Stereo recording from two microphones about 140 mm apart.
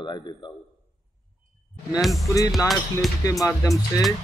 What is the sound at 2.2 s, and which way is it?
Speech, 25° left (ahead or behind).